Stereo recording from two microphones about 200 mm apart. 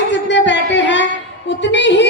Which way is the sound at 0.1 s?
60° left (ahead or behind).